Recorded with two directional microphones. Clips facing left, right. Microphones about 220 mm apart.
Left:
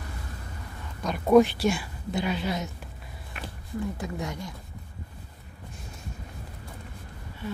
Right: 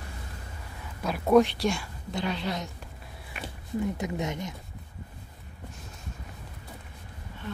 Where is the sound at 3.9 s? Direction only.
20° right (ahead or behind).